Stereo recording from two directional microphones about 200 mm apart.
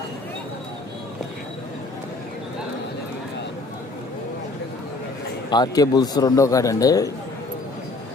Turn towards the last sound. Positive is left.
turn(degrees=15)  # may be behind; listen again after turning